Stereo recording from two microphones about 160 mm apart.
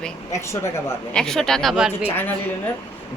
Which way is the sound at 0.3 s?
20° left (ahead or behind).